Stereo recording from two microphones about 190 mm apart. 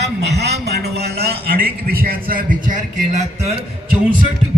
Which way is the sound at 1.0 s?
55° right (ahead or behind).